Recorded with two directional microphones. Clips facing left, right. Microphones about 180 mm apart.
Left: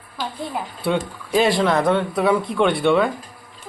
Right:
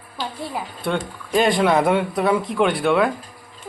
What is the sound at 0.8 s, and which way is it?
Speech, 5° left (ahead or behind).